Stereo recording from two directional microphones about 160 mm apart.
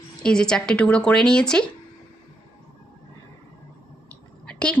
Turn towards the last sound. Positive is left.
turn(degrees=5)  # may be behind; listen again after turning